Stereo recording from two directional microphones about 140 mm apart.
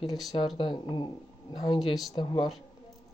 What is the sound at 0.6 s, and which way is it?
Speech, 35° left (ahead or behind).